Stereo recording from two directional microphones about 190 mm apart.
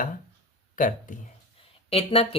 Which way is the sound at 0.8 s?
45° left (ahead or behind).